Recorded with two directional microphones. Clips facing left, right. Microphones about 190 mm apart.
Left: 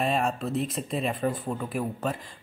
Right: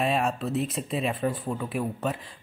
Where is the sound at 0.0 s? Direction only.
Centre (ahead or behind).